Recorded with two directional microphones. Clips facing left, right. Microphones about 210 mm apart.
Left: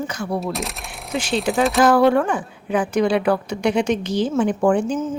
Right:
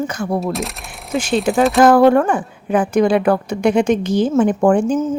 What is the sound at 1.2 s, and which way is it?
Speech, 50° right (ahead or behind).